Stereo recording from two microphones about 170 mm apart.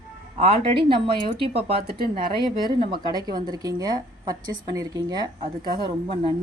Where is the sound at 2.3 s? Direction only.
25° right (ahead or behind).